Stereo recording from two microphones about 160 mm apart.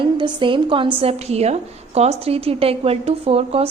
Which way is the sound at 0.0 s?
30° right (ahead or behind).